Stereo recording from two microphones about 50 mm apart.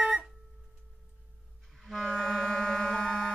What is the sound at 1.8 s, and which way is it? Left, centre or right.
Clarinet, centre.